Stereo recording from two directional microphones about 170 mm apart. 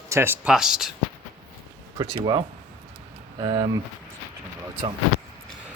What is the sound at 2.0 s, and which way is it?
Speech, 25° right (ahead or behind).